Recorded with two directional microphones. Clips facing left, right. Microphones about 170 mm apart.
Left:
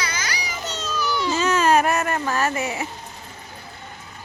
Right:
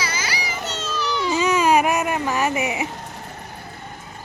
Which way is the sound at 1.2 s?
15° right (ahead or behind).